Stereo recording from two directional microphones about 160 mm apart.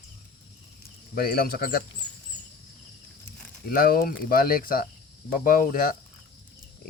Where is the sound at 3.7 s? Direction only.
65° left (ahead or behind).